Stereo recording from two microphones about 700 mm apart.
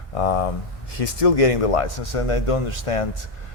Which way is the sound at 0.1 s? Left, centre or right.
Left.